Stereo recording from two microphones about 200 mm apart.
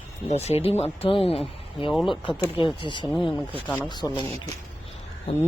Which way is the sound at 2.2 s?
25° left (ahead or behind).